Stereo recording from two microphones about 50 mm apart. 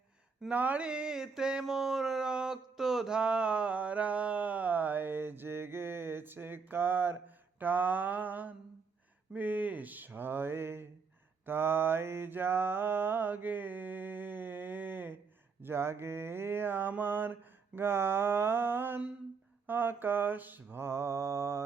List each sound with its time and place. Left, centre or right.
0.5 s speech: right
0.8 s a sound: centre; by 7.2 s right
7.6 s mantra: right
9.3 s speech: right
11.4 s mantra: right
15.6 s speech: right
17.7 s speech: right
20.8 s mantra: right